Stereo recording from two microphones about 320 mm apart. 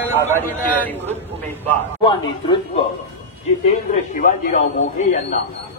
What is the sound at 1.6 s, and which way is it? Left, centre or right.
A man's voice, centre.